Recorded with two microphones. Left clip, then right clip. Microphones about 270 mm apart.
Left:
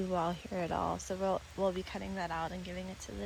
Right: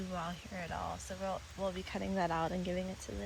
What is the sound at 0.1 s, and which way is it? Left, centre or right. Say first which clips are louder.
Speech: left 6 dB; centre.